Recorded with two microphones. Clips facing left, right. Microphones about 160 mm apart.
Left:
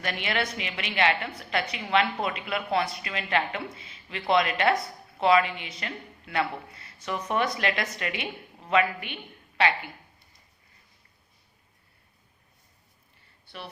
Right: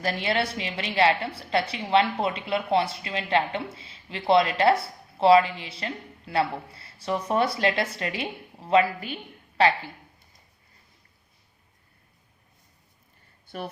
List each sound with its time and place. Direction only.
0.0 s a woman's voice: 30° right (ahead or behind)